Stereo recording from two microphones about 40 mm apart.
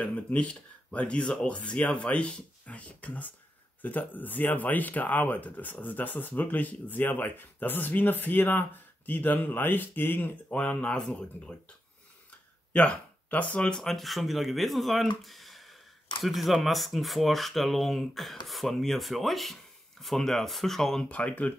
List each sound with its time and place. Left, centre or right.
0.0 s speech: left
10.5 s speech: left
12.7 s speech: left
13.6 s speech: centre
13.8 s speech: centre
21.1 s speech: left